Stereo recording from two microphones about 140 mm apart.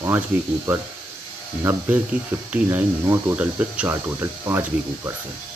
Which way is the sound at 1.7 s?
15° right (ahead or behind).